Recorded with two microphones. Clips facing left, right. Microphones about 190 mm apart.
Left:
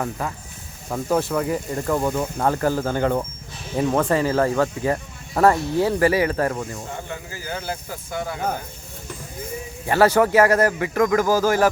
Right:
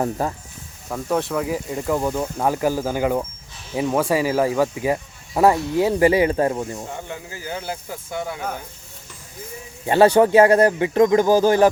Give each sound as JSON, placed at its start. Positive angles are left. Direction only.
{"t": 0.0, "sound": "speech", "side_deg": -30}
{"t": 0.9, "sound": "a man's voice", "side_deg": 0}
{"t": 9.8, "sound": "a man's voice", "side_deg": -20}